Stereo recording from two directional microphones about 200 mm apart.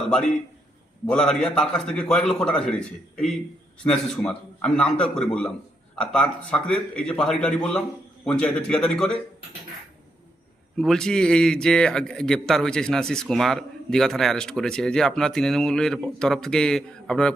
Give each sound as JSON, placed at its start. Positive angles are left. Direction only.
{"t": 0.1, "sound": "speech", "side_deg": 5}
{"t": 10.8, "sound": "speech", "side_deg": 5}